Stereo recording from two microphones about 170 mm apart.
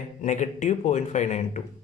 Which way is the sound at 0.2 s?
45° left (ahead or behind).